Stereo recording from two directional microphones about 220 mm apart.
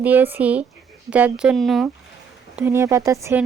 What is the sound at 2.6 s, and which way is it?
Speech, 15° right (ahead or behind).